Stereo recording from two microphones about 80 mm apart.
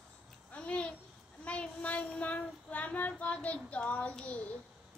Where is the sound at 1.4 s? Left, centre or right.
Centre.